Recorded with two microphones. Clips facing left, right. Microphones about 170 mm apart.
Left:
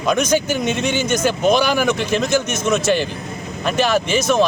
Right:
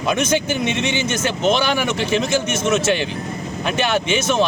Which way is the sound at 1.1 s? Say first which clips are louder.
Left 4 dB; 5° right (ahead or behind).